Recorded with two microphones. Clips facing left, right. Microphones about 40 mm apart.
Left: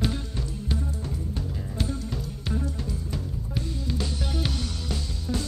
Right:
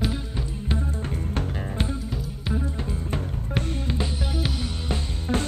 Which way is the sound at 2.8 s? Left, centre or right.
Right.